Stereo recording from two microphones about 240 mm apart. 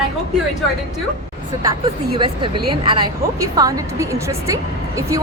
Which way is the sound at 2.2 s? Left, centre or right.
Centre.